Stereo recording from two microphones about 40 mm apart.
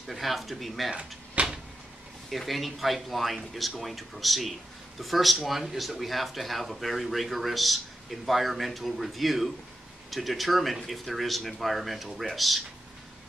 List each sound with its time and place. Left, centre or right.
0.0 s speech: centre
0.9 s door: right
2.2 s speech: centre